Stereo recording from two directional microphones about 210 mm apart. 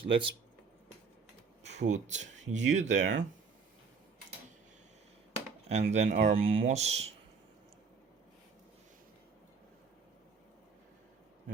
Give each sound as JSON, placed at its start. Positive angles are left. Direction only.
{"t": 0.0, "sound": "speech", "side_deg": -25}
{"t": 1.6, "sound": "speech", "side_deg": -35}
{"t": 5.6, "sound": "speech", "side_deg": -30}